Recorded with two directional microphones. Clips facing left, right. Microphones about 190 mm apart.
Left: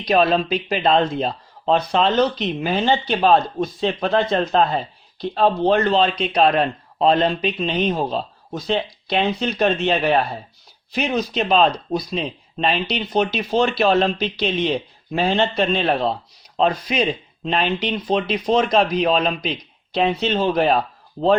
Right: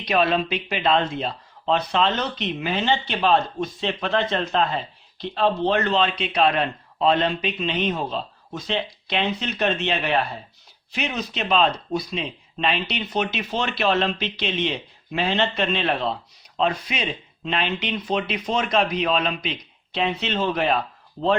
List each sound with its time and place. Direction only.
0.0 s a man's voice: 35° left (ahead or behind)